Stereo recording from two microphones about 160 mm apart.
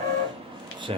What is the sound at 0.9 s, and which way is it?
Speech, 40° right (ahead or behind).